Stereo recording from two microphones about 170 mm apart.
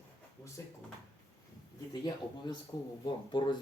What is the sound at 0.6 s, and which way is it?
Speech, 15° left (ahead or behind).